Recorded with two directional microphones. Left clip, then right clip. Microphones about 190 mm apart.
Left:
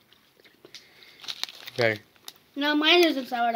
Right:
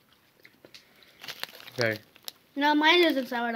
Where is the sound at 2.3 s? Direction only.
45° right (ahead or behind).